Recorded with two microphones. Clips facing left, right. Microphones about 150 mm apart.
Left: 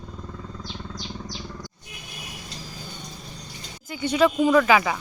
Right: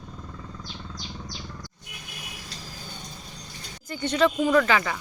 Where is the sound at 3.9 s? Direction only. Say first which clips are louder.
Left 2 dB; 10° left (ahead or behind).